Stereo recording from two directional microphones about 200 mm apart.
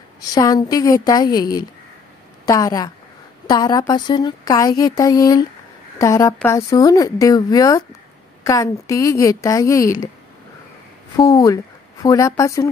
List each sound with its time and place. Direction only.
0.2 s a woman's voice: 20° left (ahead or behind)
11.1 s a woman's voice: 15° left (ahead or behind)